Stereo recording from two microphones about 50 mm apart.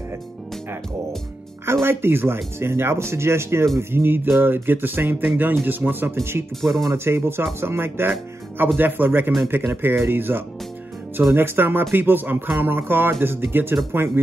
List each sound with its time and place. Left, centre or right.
1.7 s speech: right
3.9 s speech: right
6.6 s speech: centre
6.9 s speech: right